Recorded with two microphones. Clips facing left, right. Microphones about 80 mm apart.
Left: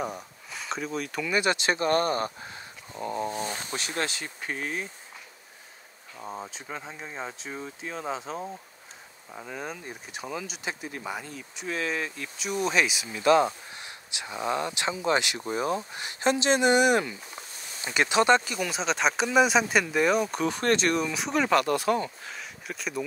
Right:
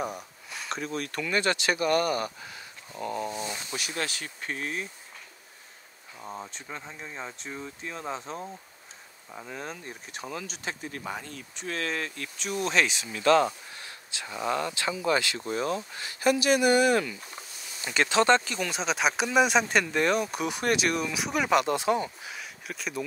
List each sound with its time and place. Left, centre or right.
0.0 s speech: centre
1.4 s speech: left
2.9 s dog: centre
3.3 s speech: left
4.4 s speech: centre
6.1 s speech: centre
18.7 s speech: centre
21.5 s speech: centre
22.2 s speech: centre